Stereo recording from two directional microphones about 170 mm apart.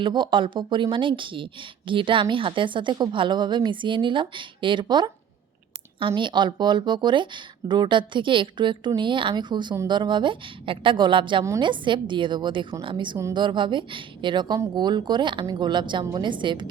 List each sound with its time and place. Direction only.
0.0 s speech: 25° right (ahead or behind)
11.4 s a woman's voice: 15° right (ahead or behind)
11.7 s speech: 30° right (ahead or behind)
13.1 s a woman's voice: 15° right (ahead or behind)
13.4 s speech: 30° right (ahead or behind)